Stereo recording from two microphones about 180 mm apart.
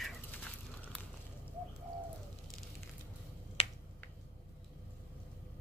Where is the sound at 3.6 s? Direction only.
35° left (ahead or behind).